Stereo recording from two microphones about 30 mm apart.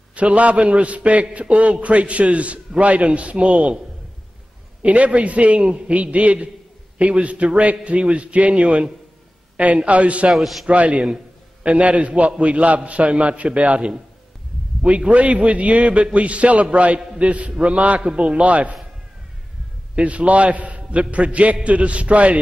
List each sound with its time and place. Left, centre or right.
0.1 s a man's voice: right
4.8 s a man's voice: right
5.7 s a man's voice: right
5.9 s a man's voice: right
9.8 s a man's voice: right
10.3 s a man's voice: centre
10.7 s a man's voice: right
14.9 s a man's voice: right
18.1 s a man's voice: right
18.4 s a man's voice: right
20.0 s a man's voice: right